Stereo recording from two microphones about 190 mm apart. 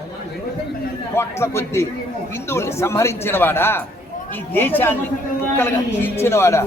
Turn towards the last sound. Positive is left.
turn(degrees=15)  # may be behind; listen again after turning